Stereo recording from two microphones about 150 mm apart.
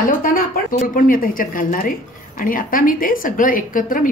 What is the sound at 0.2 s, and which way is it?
Speech, 65° left (ahead or behind).